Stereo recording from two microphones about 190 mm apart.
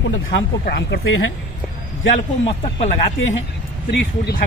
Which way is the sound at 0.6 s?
55° left (ahead or behind).